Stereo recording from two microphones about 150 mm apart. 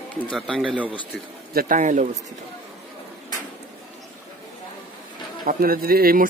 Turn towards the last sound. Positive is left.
turn(degrees=-85)